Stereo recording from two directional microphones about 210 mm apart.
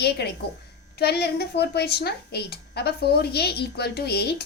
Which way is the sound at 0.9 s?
50° left (ahead or behind).